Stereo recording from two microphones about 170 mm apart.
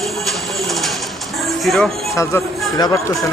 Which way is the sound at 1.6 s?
Centre (ahead or behind).